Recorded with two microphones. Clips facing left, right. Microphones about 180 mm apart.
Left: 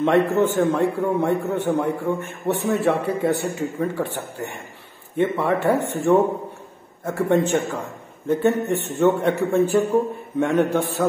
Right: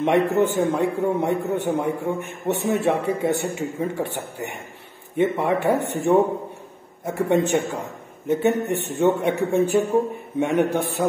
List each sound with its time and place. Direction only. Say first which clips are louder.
0.0 s a man's voice: left 1 dB; 15° right (ahead or behind)